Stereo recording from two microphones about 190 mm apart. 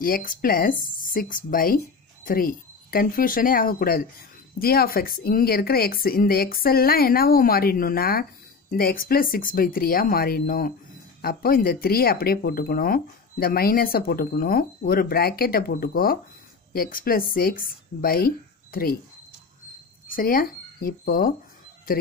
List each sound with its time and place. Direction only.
0.0 s speech: 50° left (ahead or behind)
20.1 s speech: 50° left (ahead or behind)